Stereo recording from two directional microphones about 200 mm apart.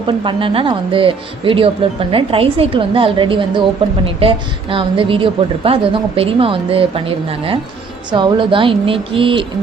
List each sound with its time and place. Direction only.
0.1 s a woman's voice: 25° right (ahead or behind)